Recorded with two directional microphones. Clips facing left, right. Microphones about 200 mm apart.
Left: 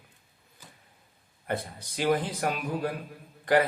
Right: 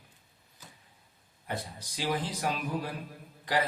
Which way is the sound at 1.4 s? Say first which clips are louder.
Left 5 dB; 55° left (ahead or behind).